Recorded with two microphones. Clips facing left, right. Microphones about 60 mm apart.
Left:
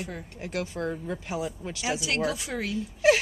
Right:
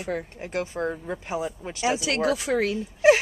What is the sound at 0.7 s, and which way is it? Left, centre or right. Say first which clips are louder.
Speech: right 2 dB; right.